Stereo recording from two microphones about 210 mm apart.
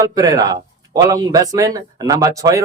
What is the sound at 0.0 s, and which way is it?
Speech, 20° right (ahead or behind).